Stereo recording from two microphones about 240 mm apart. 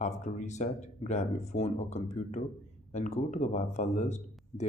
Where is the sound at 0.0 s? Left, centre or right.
Left.